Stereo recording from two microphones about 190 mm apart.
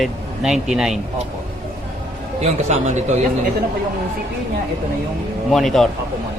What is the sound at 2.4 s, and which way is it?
Speech, 35° right (ahead or behind).